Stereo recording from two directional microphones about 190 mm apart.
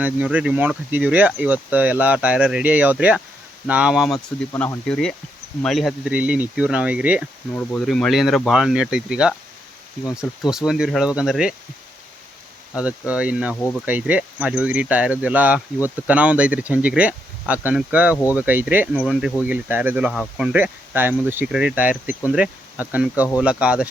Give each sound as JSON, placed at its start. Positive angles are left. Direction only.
{"t": 0.0, "sound": "speech", "side_deg": -10}
{"t": 4.5, "sound": "speech", "side_deg": 10}
{"t": 7.5, "sound": "speech", "side_deg": 5}
{"t": 12.7, "sound": "speech", "side_deg": -5}